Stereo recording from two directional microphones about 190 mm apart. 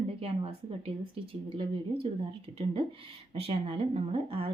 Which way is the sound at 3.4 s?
30° right (ahead or behind).